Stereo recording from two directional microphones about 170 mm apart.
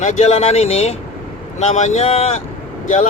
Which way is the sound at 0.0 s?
40° left (ahead or behind).